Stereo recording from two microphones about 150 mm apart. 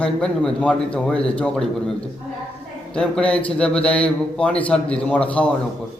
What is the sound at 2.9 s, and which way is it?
Speech, 5° left (ahead or behind).